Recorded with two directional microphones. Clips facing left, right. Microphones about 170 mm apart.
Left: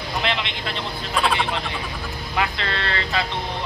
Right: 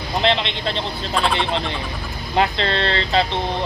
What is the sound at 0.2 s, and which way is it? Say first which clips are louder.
Speech: right 8 dB; 30° right (ahead or behind).